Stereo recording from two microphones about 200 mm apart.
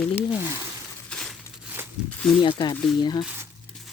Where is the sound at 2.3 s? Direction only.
25° left (ahead or behind).